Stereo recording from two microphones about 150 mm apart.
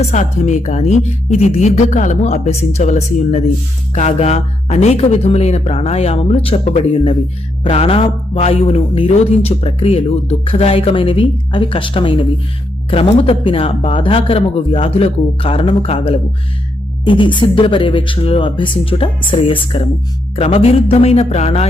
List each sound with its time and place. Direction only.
0.0 s speech: 50° left (ahead or behind)